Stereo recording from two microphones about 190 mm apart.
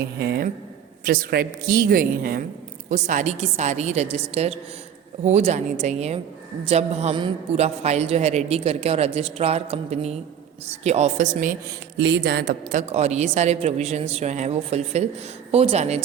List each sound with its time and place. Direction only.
0.2 s a woman's voice: 60° right (ahead or behind); by 11.5 s 40° right (ahead or behind)
11.9 s speech: 65° right (ahead or behind)
12.7 s a man's voice: 35° right (ahead or behind)